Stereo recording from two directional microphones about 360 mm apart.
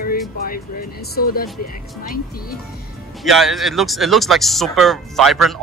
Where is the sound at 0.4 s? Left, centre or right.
Left.